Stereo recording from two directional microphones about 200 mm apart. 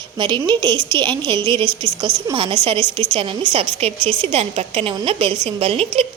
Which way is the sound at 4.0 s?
10° left (ahead or behind).